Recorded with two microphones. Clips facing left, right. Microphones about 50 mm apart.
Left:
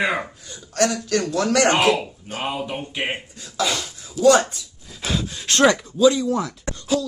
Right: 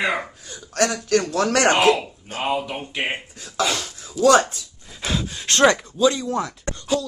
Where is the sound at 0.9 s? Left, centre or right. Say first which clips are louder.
Right 2 dB; right.